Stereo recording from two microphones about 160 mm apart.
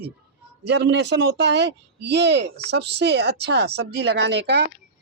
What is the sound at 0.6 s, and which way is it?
Speech, 90° right.